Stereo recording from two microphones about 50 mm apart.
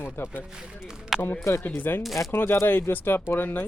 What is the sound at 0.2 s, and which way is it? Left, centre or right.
Speech, left.